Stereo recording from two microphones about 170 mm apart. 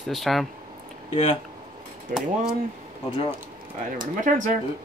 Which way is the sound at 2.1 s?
50° right (ahead or behind).